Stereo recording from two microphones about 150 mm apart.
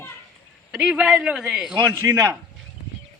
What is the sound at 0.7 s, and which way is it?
A man's voice, 5° right (ahead or behind).